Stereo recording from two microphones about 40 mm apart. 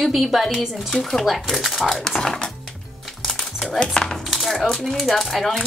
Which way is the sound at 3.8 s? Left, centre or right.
Left.